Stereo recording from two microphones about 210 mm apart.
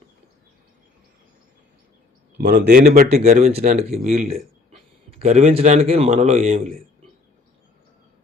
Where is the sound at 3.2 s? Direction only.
35° right (ahead or behind).